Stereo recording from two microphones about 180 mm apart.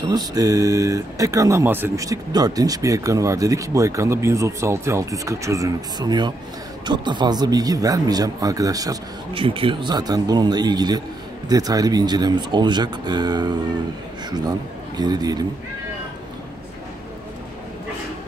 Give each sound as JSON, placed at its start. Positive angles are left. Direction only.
{"t": 0.0, "sound": "speech", "side_deg": -20}
{"t": 9.3, "sound": "speech", "side_deg": -30}
{"t": 15.0, "sound": "speech", "side_deg": -20}